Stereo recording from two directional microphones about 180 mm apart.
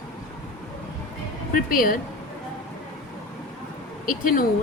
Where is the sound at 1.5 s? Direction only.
50° left (ahead or behind).